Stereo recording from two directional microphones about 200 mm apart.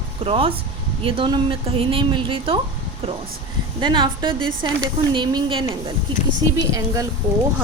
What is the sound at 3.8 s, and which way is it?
A woman's voice, 20° right (ahead or behind).